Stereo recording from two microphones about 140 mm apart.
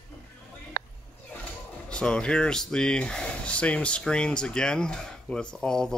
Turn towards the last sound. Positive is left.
turn(degrees=5)  # may be behind; listen again after turning